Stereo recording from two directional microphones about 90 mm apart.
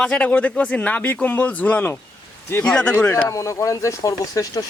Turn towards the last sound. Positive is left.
turn(degrees=40)  # may be behind; listen again after turning